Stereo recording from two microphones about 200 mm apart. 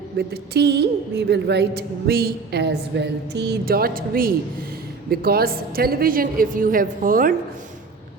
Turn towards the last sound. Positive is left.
turn(degrees=-45)  # may be behind; listen again after turning